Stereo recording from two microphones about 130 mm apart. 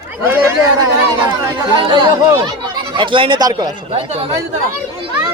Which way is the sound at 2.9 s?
40° right (ahead or behind).